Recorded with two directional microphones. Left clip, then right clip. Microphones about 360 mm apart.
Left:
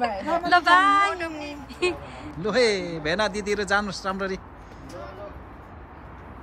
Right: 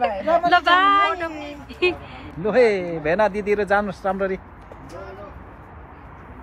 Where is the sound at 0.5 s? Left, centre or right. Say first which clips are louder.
Even; centre.